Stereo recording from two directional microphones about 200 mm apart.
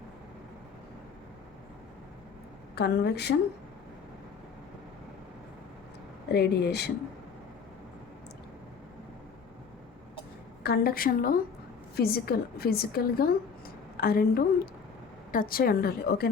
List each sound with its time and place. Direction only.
2.7 s a woman's voice: 55° left (ahead or behind)
6.3 s speech: 55° left (ahead or behind)
10.6 s a woman's voice: 50° left (ahead or behind)